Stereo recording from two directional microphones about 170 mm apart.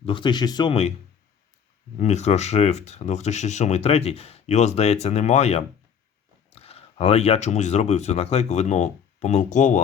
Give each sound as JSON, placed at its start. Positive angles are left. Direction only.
{"t": 0.0, "sound": "speech", "side_deg": 30}
{"t": 2.0, "sound": "speech", "side_deg": 40}